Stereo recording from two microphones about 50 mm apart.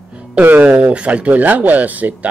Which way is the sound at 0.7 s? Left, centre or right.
Right.